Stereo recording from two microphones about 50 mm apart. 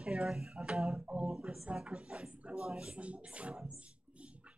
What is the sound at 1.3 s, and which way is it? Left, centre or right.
A man's voice, centre.